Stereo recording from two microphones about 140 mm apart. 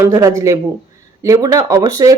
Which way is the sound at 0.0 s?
25° right (ahead or behind).